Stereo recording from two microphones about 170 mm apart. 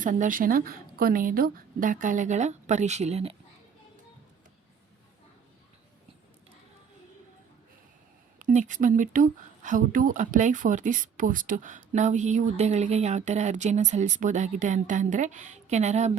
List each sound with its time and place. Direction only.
0.0 s speech: 50° right (ahead or behind)
8.4 s speech: 50° right (ahead or behind)